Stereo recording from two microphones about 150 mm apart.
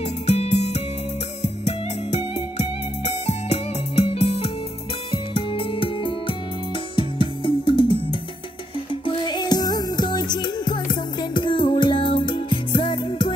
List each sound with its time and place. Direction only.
0.3 s music: 45° left (ahead or behind)